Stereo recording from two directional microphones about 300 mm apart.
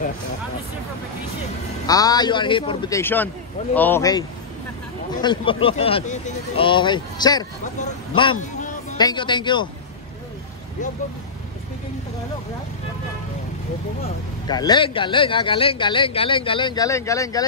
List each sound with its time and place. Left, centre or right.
1.9 s speech: centre
5.2 s speech: centre
14.5 s speech: centre